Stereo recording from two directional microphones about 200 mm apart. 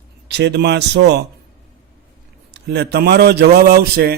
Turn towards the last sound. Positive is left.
turn(degrees=-55)  # may be behind; listen again after turning